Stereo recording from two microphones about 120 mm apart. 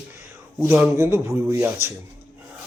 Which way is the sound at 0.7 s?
15° right (ahead or behind).